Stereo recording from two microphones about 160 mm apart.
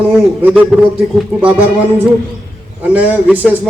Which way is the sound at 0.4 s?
5° right (ahead or behind).